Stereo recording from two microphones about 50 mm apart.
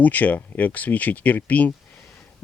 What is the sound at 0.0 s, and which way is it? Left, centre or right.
Speech, left.